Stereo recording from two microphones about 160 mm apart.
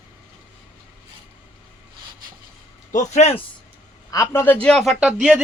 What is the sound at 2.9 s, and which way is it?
Speech, 45° left (ahead or behind).